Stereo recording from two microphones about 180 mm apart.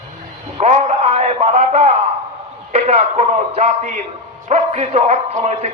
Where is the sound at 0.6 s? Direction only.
35° right (ahead or behind).